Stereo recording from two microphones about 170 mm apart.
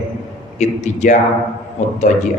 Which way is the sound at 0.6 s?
40° left (ahead or behind).